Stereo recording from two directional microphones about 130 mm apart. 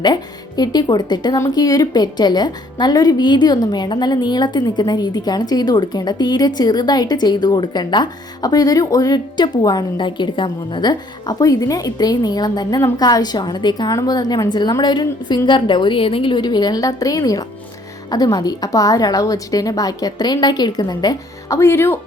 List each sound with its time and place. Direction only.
0.0 s a woman's voice: 30° left (ahead or behind)